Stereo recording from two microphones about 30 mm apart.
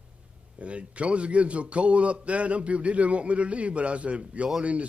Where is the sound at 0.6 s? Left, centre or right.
Right.